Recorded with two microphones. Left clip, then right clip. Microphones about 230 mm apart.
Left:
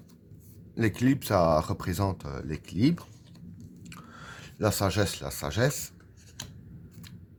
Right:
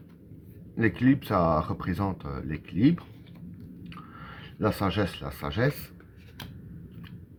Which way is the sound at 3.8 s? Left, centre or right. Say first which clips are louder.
Right 1 dB; left.